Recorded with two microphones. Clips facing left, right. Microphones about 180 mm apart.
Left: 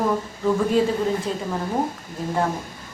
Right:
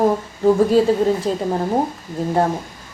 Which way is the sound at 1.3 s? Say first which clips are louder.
Right 6 dB; 35° right (ahead or behind).